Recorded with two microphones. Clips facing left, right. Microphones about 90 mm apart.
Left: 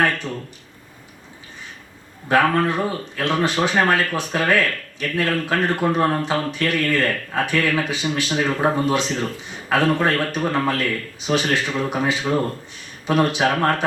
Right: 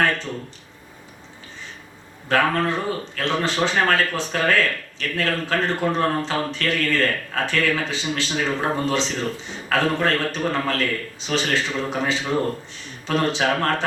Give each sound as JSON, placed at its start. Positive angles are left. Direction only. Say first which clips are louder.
{"t": 2.3, "sound": "speech", "louder": "left 3 dB", "side_deg": 15}